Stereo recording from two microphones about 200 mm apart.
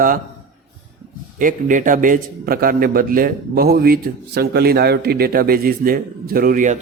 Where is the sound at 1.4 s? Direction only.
40° right (ahead or behind).